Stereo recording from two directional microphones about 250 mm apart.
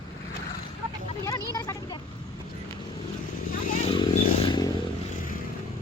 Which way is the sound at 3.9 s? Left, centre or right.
Centre.